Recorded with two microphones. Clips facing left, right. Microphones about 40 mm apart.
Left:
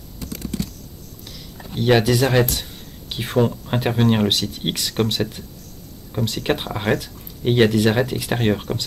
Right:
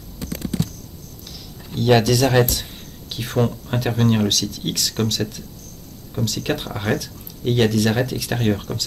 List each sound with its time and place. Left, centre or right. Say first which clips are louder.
0.2 s computer keyboard: right 2 dB; right
1.7 s speech: even; centre
3.1 s a sound: left 2 dB; left
3.3 s speech: left 2 dB; centre